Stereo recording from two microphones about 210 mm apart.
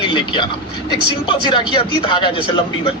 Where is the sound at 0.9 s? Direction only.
20° left (ahead or behind).